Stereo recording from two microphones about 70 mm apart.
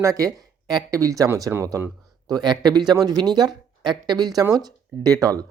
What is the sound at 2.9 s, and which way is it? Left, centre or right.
Speech, right.